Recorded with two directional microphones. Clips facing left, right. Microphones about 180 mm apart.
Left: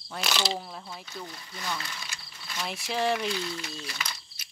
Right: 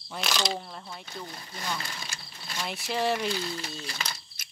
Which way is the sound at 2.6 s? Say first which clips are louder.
Even; centre (ahead or behind).